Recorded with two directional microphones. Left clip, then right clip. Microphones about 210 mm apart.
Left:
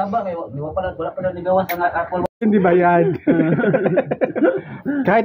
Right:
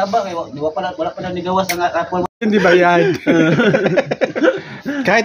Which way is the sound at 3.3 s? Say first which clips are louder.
Right 6 dB; 55° right (ahead or behind).